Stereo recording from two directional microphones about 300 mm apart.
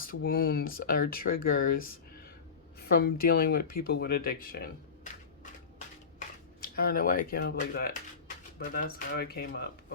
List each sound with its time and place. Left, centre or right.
0.0 s speech: left
2.9 s speech: left
6.1 s a sound: left
7.3 s speech: left